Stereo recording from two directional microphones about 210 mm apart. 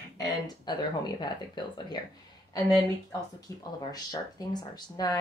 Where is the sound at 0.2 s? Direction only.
20° left (ahead or behind).